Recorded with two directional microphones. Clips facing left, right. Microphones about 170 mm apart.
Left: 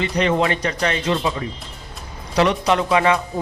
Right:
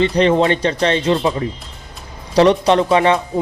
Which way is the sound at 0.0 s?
30° right (ahead or behind).